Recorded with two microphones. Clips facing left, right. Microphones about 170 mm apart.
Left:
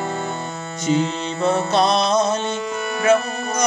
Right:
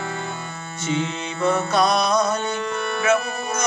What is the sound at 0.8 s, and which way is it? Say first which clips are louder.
Music: left 5 dB; 35° left (ahead or behind).